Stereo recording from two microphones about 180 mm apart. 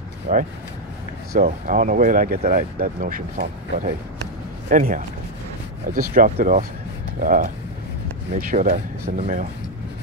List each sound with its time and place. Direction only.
0.3 s speech: 45° right (ahead or behind)